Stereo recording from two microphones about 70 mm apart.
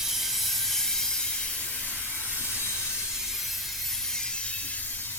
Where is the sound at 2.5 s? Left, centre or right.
Left.